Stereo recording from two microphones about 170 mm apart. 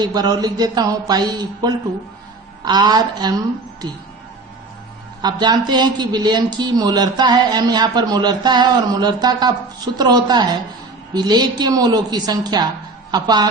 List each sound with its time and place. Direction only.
0.0 s a man's voice: 25° right (ahead or behind)
5.2 s a man's voice: 25° right (ahead or behind)